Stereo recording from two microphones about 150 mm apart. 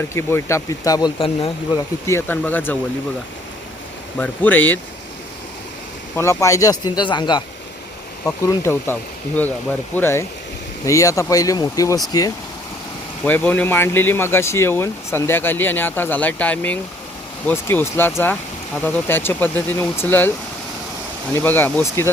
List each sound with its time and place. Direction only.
0.1 s speech: 15° left (ahead or behind)
1.2 s speech: 35° left (ahead or behind)
2.0 s speech: 15° left (ahead or behind)
4.2 s speech: 10° left (ahead or behind)
6.1 s speech: 20° left (ahead or behind)
8.2 s speech: 20° left (ahead or behind)
13.2 s speech: 10° left (ahead or behind)
21.3 s speech: 15° left (ahead or behind)